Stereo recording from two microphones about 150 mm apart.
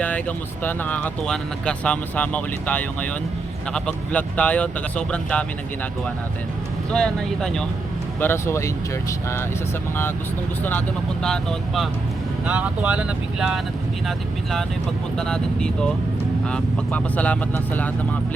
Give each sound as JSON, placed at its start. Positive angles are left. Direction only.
{"t": 0.0, "sound": "speech", "side_deg": 10}
{"t": 6.9, "sound": "speech", "side_deg": 5}
{"t": 8.2, "sound": "speech", "side_deg": 15}
{"t": 10.6, "sound": "speech", "side_deg": 10}
{"t": 12.5, "sound": "speech", "side_deg": -10}
{"t": 15.2, "sound": "speech", "side_deg": 5}